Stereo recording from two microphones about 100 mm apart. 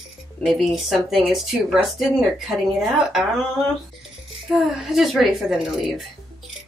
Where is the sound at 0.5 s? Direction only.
Centre (ahead or behind).